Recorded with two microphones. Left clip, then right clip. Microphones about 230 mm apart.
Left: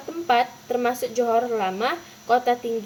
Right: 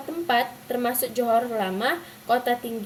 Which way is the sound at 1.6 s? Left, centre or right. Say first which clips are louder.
Left 1 dB; centre.